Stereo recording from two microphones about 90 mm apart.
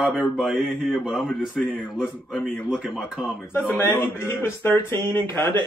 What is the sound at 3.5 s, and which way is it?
Speech, 25° left (ahead or behind).